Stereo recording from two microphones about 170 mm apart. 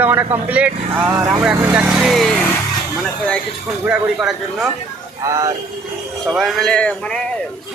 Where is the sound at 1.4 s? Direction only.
10° right (ahead or behind).